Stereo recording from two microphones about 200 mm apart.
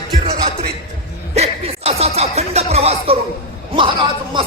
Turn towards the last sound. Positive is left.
turn(degrees=-25)  # may be behind; listen again after turning